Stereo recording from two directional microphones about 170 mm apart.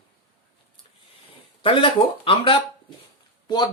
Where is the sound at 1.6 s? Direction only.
30° left (ahead or behind).